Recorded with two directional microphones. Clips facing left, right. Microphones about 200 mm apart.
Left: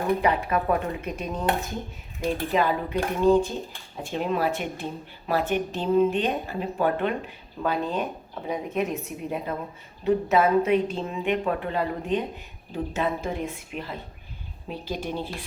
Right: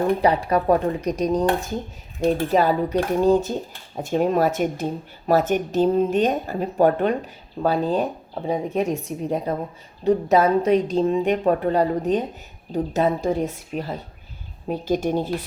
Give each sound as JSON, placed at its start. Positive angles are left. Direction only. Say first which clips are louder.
{"t": 0.2, "sound": "a woman's voice", "louder": "right 5 dB", "side_deg": -35}